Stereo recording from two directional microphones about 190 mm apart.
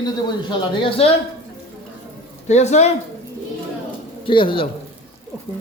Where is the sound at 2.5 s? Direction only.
35° left (ahead or behind).